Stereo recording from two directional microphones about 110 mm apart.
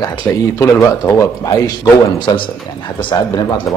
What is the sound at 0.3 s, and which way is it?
Speech, 30° left (ahead or behind).